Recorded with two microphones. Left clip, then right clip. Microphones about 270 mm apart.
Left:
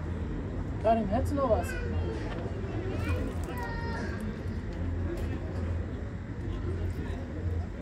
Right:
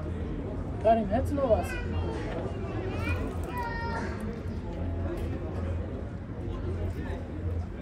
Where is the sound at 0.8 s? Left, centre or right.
Left.